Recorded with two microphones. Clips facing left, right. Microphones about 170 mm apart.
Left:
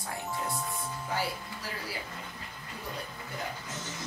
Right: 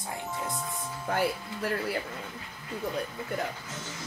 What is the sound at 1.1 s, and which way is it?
Speech, 55° right (ahead or behind).